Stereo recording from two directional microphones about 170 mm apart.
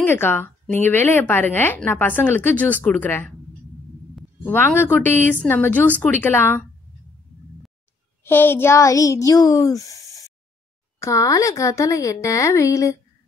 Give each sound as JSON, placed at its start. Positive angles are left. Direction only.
{"t": 0.0, "sound": "speech", "side_deg": 15}
{"t": 4.5, "sound": "speech", "side_deg": 15}
{"t": 8.2, "sound": "speech", "side_deg": 10}